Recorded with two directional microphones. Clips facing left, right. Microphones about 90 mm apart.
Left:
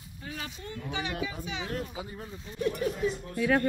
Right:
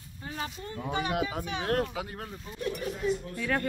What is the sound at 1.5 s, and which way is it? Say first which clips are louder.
Speech: right 6 dB; 65° right (ahead or behind).